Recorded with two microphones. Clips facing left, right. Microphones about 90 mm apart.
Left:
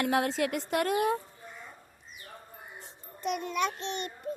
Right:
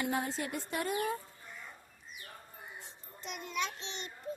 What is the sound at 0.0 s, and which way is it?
Speech, 80° left.